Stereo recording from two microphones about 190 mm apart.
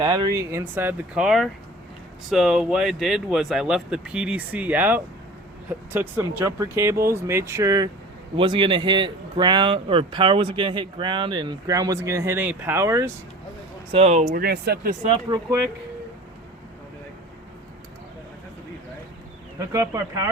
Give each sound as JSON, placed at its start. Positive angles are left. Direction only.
{"t": 0.0, "sound": "a man's voice", "side_deg": -20}
{"t": 13.9, "sound": "speech", "side_deg": -35}
{"t": 15.1, "sound": "a man's voice", "side_deg": -20}
{"t": 19.5, "sound": "speech", "side_deg": -15}